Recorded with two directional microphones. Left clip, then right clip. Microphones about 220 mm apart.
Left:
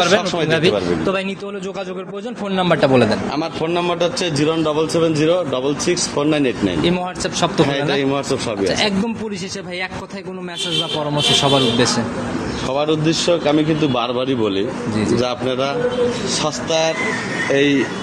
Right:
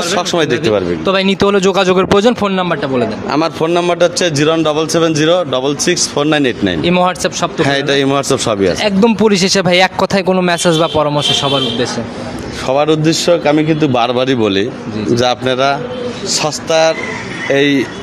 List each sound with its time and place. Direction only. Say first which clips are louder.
1.0 s a man's voice: right 9 dB; 45° right (ahead or behind)
2.8 s a man's voice: left 1 dB; 20° left (ahead or behind)
3.3 s a man's voice: right 7 dB; 50° right (ahead or behind)
12.6 s a man's voice: right 7 dB; 50° right (ahead or behind)